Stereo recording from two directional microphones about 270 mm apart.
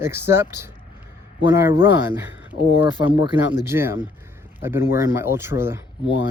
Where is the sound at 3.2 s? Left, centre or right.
Centre.